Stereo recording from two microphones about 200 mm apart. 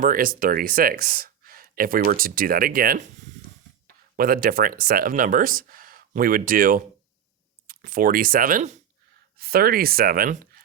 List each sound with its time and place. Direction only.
0.0 s speech: 45° right (ahead or behind)
4.2 s speech: 45° right (ahead or behind)